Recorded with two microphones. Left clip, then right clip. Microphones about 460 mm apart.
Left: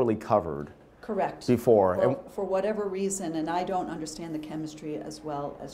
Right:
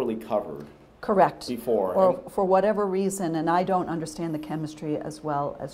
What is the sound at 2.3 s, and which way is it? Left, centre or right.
A woman's voice, right.